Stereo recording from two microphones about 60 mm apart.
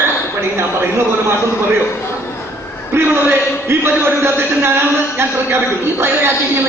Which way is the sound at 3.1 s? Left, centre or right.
Right.